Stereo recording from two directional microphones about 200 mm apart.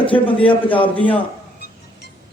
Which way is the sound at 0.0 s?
25° left (ahead or behind).